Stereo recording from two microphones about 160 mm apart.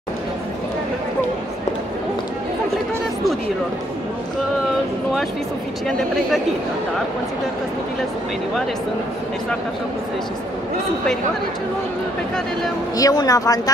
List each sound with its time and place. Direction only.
5.9 s speech: centre (ahead or behind)
12.9 s speech: 20° left (ahead or behind)